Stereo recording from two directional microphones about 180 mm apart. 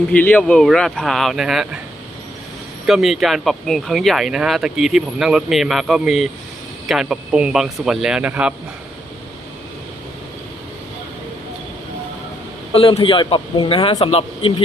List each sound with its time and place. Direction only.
0.1 s speech: 10° left (ahead or behind)
2.8 s speech: centre (ahead or behind)
12.7 s a man's voice: 30° left (ahead or behind)